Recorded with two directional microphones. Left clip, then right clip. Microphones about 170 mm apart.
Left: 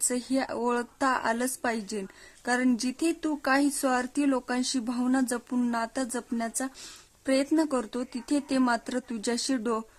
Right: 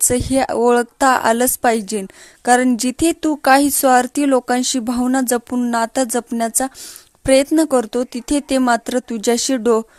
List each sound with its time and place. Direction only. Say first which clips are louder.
0.1 s a woman's voice: right 14 dB; 40° right (ahead or behind)